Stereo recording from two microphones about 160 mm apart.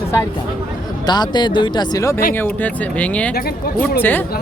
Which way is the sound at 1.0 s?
25° left (ahead or behind).